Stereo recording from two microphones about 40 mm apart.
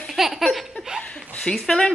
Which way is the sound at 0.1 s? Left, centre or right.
Centre.